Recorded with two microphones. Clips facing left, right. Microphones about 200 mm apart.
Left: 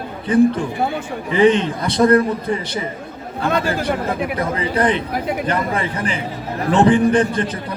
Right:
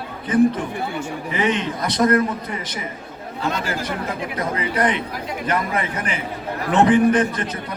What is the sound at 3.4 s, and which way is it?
Speech, 55° left (ahead or behind).